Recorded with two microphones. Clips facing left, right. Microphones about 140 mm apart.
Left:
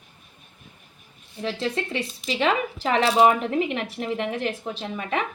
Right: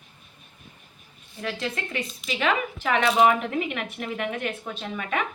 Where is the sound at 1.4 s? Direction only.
30° left (ahead or behind).